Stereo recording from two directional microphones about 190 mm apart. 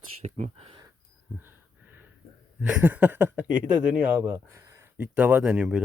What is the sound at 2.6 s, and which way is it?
Speech, 10° right (ahead or behind).